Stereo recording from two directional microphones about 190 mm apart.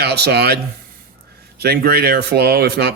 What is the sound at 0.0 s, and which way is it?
A man's voice, 60° right (ahead or behind).